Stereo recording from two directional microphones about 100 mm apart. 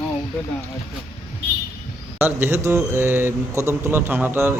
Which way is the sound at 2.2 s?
20° right (ahead or behind).